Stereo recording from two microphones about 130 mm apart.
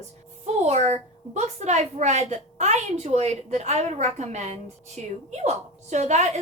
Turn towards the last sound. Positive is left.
turn(degrees=-60)  # may be behind; listen again after turning